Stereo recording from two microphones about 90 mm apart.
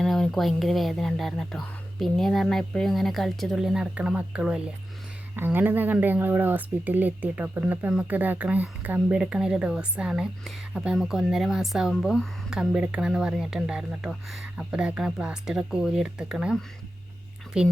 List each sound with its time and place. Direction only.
0.0 s speech: 5° left (ahead or behind)
3.9 s speech: 15° right (ahead or behind)
5.4 s speech: 20° right (ahead or behind)